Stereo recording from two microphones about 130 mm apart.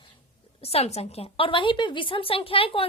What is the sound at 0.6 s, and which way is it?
A woman's voice, 50° left (ahead or behind).